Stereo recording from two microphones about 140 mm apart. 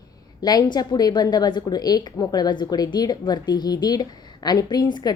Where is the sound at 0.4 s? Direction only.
30° left (ahead or behind).